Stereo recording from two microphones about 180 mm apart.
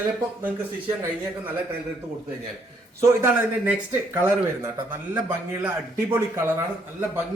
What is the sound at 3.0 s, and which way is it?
Speech, 10° right (ahead or behind).